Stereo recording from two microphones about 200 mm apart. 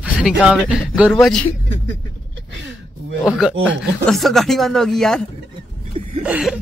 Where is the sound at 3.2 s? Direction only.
5° right (ahead or behind).